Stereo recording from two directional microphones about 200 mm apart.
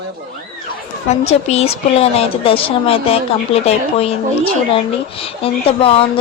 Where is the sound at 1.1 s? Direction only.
30° left (ahead or behind).